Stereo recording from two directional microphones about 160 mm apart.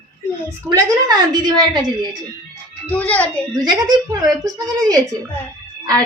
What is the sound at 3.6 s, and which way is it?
A woman's voice, 25° right (ahead or behind).